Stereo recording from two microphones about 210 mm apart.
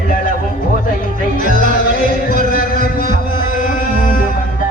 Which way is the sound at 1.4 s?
40° left (ahead or behind).